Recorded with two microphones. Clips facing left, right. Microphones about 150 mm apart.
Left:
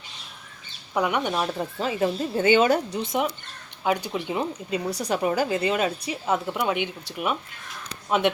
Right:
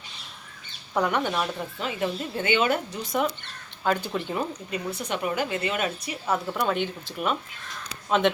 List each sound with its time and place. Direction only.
0.9 s speech: 10° left (ahead or behind)
1.8 s a woman's voice: 30° left (ahead or behind)
3.8 s speech: 10° left (ahead or behind)
4.9 s a woman's voice: 40° left (ahead or behind)
6.5 s speech: 10° left (ahead or behind)